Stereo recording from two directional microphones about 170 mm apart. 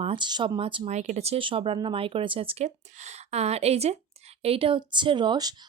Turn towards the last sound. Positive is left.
turn(degrees=-25)  # may be behind; listen again after turning